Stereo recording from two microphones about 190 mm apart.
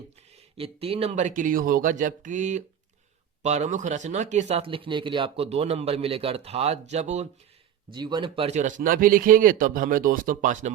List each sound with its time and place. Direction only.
0.5 s speech: 30° right (ahead or behind)
7.9 s a man's voice: 25° right (ahead or behind); by 10.7 s 40° right (ahead or behind)